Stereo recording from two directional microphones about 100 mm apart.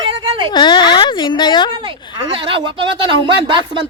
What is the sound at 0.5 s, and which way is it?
Speech, 50° left (ahead or behind).